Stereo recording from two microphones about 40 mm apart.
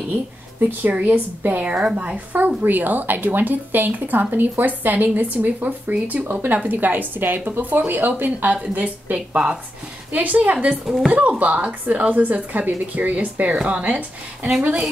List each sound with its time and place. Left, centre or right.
1.0 s speech: right
8.7 s speech: right